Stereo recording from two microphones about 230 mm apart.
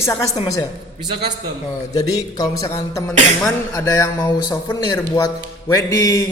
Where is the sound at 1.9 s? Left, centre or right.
Centre.